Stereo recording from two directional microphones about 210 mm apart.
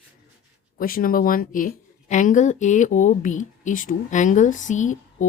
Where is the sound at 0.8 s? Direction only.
45° left (ahead or behind).